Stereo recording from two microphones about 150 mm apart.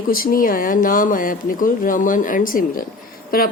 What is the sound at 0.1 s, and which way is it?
Speech, 70° left (ahead or behind).